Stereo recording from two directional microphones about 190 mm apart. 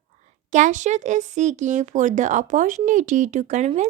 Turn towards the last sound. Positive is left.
turn(degrees=-40)  # may be behind; listen again after turning